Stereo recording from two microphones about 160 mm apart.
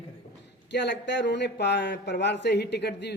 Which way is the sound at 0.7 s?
90° left.